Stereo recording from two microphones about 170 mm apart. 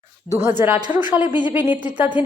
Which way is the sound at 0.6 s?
10° right (ahead or behind).